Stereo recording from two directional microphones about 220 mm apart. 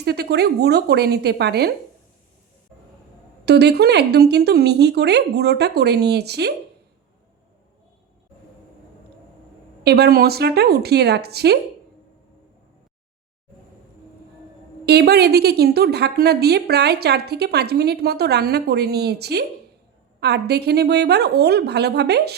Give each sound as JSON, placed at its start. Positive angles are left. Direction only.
{"t": 0.0, "sound": "a woman's voice", "side_deg": -45}
{"t": 3.4, "sound": "a woman's voice", "side_deg": -50}
{"t": 9.8, "sound": "a woman's voice", "side_deg": -45}
{"t": 14.8, "sound": "a woman's voice", "side_deg": -45}